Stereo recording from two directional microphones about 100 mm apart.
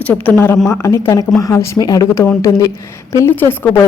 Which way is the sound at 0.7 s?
30° left (ahead or behind).